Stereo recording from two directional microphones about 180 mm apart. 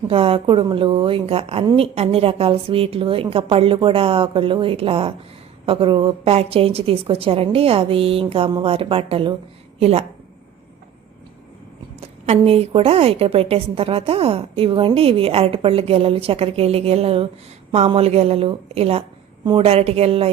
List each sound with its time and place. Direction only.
0.1 s a woman's voice: 30° right (ahead or behind)
11.9 s a woman's voice: 35° right (ahead or behind)